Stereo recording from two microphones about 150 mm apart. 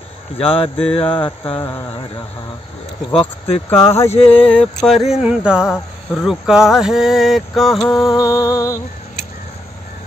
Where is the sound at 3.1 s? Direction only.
40° left (ahead or behind).